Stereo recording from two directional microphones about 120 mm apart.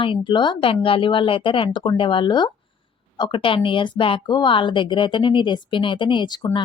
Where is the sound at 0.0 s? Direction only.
45° left (ahead or behind).